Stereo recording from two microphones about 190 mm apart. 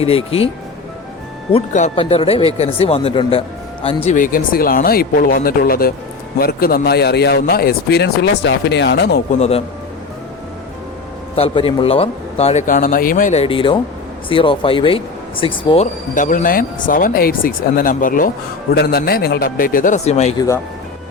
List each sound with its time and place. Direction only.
0.3 s speech: 30° left (ahead or behind)
1.5 s speech: 40° left (ahead or behind); by 9.2 s 60° left (ahead or behind)
9.4 s speech: 30° left (ahead or behind)
11.3 s speech: 30° left (ahead or behind)
16.1 s speech: 45° left (ahead or behind)